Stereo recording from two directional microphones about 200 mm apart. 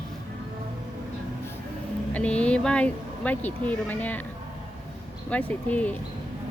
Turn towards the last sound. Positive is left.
turn(degrees=5)  # may be behind; listen again after turning